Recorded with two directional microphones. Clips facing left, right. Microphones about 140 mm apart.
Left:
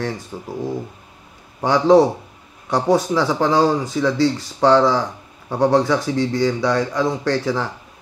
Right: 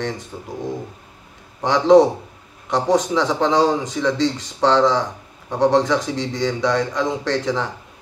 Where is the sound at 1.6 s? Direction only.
10° left (ahead or behind).